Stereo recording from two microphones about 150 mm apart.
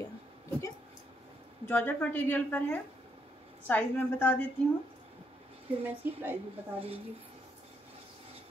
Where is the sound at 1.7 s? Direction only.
10° left (ahead or behind).